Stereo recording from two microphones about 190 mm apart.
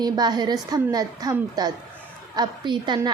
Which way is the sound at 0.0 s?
20° right (ahead or behind).